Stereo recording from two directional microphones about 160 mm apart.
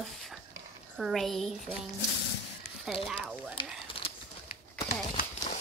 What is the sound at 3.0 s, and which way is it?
Speech, 5° right (ahead or behind).